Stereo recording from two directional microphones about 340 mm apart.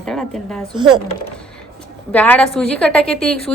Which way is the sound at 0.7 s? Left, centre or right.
Centre.